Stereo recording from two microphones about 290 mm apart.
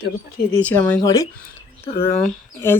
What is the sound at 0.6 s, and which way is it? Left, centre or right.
Speech, centre.